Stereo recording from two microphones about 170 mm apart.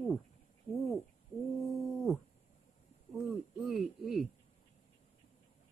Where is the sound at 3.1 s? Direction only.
Centre (ahead or behind).